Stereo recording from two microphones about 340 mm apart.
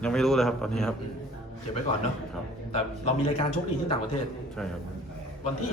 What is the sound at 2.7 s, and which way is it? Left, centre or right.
Speech, centre.